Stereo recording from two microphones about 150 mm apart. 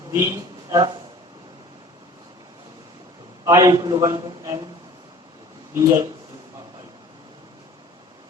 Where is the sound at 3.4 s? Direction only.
25° right (ahead or behind).